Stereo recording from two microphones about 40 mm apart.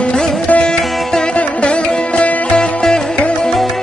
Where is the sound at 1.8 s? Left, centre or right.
Left.